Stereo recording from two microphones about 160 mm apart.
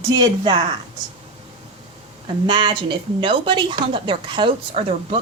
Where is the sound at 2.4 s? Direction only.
30° right (ahead or behind).